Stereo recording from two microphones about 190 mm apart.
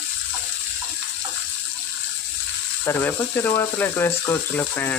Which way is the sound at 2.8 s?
10° left (ahead or behind).